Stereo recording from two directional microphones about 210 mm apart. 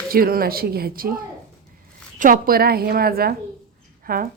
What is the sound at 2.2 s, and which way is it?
Speech, 40° right (ahead or behind).